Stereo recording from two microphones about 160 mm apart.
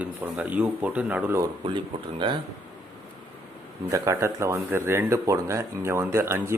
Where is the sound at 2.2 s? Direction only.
30° right (ahead or behind).